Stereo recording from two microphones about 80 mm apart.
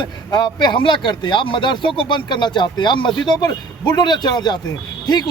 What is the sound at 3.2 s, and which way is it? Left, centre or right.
A man's voice, left.